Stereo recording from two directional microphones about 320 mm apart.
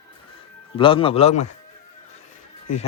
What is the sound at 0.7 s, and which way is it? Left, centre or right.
Speech, centre.